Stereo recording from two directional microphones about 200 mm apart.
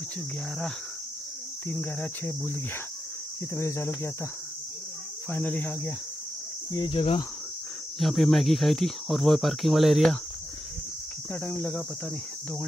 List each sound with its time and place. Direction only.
1.7 s speech: 10° left (ahead or behind)
5.3 s speech: 10° left (ahead or behind)
6.7 s speech: 25° left (ahead or behind)
8.0 s speech: centre (ahead or behind)
11.3 s speech: 10° left (ahead or behind)